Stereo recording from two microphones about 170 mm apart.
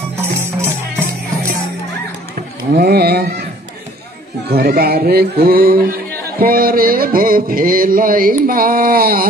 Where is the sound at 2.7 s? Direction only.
70° right (ahead or behind).